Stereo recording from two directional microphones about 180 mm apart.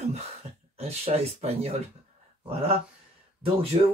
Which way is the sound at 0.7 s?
35° right (ahead or behind).